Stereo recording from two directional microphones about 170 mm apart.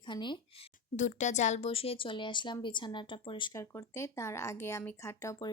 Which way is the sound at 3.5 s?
15° left (ahead or behind).